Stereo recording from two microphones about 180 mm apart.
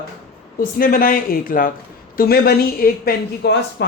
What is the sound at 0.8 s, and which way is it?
A woman's voice, 55° left (ahead or behind).